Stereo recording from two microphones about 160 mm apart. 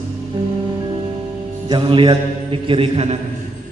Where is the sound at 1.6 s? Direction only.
30° right (ahead or behind).